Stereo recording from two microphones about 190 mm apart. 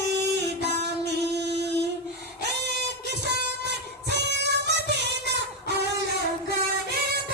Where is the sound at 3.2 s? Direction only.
60° right (ahead or behind).